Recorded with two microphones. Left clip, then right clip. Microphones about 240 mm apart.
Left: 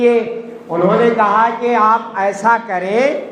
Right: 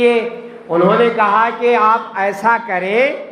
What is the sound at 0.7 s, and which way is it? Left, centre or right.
A man's voice, right.